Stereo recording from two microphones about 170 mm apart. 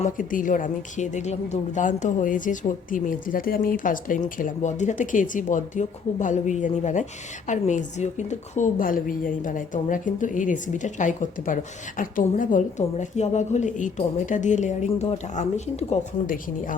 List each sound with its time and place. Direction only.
0.0 s a woman's voice: 50° left (ahead or behind)